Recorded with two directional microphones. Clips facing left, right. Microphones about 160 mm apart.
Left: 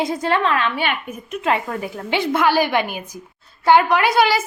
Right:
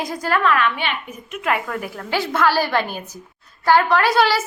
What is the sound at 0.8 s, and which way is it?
Speech, 45° left (ahead or behind).